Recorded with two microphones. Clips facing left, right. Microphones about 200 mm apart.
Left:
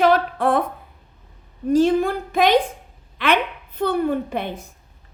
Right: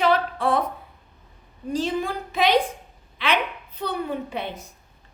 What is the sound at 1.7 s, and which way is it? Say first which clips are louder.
A woman's voice: left 9 dB; 50° left (ahead or behind).